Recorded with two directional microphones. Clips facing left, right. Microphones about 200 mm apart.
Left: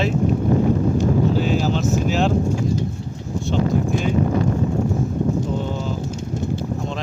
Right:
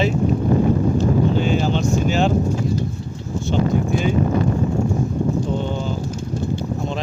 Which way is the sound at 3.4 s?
Centre (ahead or behind).